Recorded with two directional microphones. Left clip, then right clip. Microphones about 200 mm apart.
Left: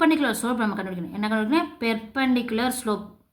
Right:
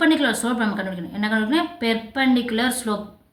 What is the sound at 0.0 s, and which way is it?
A woman's voice, 30° left (ahead or behind).